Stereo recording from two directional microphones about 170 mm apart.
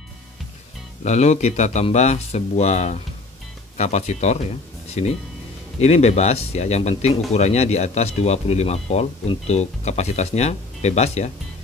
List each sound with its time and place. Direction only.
1.0 s speech: 40° left (ahead or behind)
5.8 s speech: 40° left (ahead or behind)